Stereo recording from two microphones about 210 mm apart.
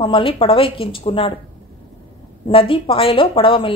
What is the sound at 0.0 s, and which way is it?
A woman's voice, 25° left (ahead or behind).